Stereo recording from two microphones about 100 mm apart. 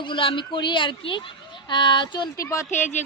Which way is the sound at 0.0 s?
60° left (ahead or behind).